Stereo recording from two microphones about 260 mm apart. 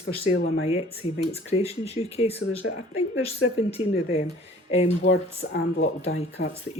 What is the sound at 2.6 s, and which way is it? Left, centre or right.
Speech, left.